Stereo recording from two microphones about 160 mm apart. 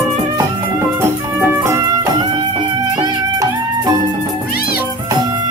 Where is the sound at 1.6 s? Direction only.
20° right (ahead or behind).